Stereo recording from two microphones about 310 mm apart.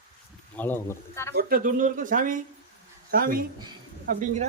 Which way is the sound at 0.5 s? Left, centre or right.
Centre.